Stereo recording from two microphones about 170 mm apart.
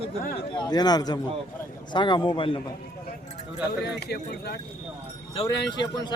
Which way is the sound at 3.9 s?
75° left (ahead or behind).